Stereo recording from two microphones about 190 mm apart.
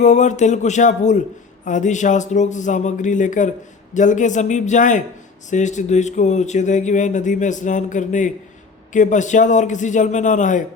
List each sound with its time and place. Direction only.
0.0 s speech: 40° left (ahead or behind)